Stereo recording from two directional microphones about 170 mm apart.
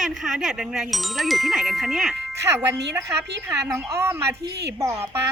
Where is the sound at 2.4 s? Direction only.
15° right (ahead or behind).